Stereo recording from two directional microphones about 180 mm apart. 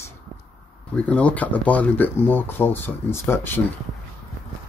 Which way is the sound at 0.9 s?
5° left (ahead or behind).